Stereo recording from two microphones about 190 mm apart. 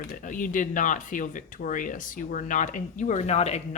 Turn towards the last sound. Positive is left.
turn(degrees=35)  # may be behind; listen again after turning